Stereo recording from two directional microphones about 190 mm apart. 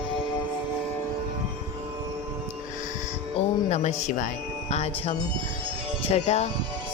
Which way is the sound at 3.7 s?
35° left (ahead or behind).